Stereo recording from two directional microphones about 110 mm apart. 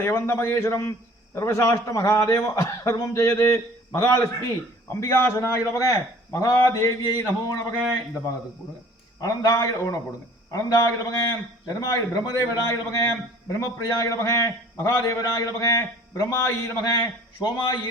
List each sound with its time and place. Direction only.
0.0 s a man's voice: 20° left (ahead or behind)
9.2 s a man's voice: 30° left (ahead or behind)